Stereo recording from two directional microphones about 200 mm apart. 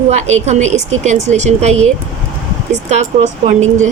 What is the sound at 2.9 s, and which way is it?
Speech, 35° right (ahead or behind).